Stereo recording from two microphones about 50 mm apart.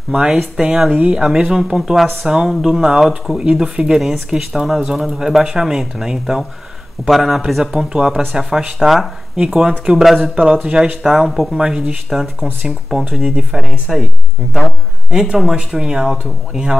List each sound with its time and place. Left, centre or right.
0.1 s speech: centre
4.7 s speech: centre
5.0 s speech: centre
7.7 s speech: centre
10.3 s speech: centre